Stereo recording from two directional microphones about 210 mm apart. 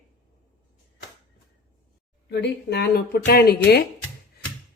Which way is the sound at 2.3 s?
55° left (ahead or behind).